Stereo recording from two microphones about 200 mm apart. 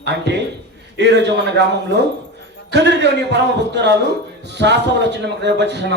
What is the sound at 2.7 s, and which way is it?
Speech, 60° right (ahead or behind).